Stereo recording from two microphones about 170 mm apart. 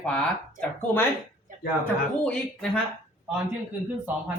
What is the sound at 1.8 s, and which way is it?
Speech, 5° left (ahead or behind).